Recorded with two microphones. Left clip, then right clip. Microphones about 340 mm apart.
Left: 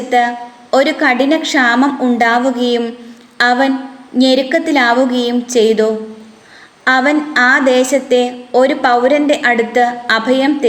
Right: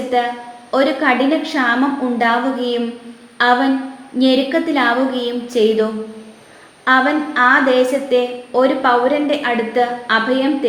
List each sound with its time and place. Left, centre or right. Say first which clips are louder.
0.1 s a woman's voice: left 6 dB; left